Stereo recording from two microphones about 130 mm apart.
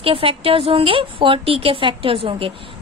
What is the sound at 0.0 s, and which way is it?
A woman's voice, 45° right (ahead or behind).